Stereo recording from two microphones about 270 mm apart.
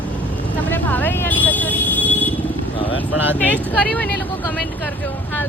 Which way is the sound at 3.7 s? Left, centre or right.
Centre.